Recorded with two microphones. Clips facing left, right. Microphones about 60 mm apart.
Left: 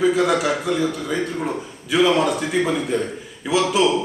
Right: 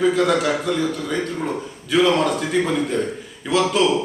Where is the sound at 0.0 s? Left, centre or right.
Centre.